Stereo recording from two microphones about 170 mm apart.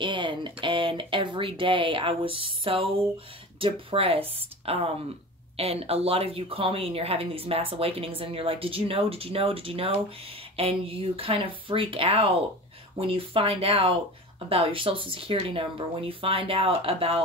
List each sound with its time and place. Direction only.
0.0 s speech: 30° right (ahead or behind)